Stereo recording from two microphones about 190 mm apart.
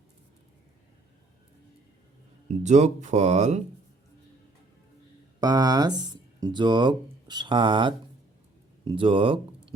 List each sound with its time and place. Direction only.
2.5 s speech: 40° right (ahead or behind)
5.4 s speech: 20° right (ahead or behind)